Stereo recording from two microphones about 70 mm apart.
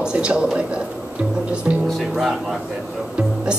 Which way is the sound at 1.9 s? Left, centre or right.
Centre.